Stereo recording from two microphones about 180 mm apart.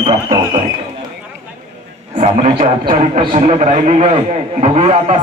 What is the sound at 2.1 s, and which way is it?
A man's voice, 40° right (ahead or behind).